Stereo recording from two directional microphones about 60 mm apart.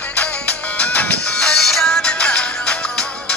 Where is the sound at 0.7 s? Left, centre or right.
Left.